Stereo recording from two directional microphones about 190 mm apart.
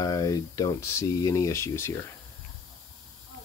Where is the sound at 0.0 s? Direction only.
20° left (ahead or behind).